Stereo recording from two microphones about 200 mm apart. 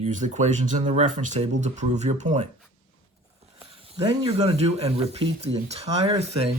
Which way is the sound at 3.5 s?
30° right (ahead or behind).